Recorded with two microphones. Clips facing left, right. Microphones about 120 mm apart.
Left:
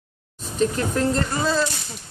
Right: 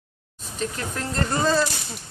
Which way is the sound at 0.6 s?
30° left (ahead or behind).